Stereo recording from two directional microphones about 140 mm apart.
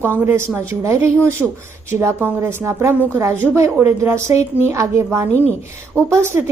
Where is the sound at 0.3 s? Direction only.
20° right (ahead or behind).